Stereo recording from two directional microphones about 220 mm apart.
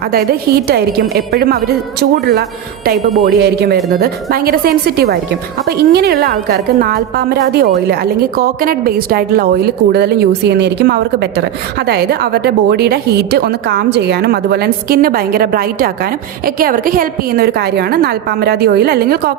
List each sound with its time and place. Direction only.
1.1 s a woman's voice: 45° right (ahead or behind)